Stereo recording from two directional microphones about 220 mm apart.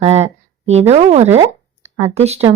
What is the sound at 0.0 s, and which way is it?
Speech, 30° right (ahead or behind).